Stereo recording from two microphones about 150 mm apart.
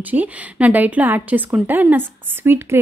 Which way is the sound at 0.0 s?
10° right (ahead or behind).